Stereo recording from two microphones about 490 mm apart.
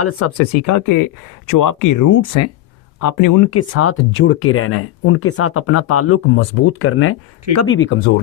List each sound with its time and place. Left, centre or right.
0.0 s speech: left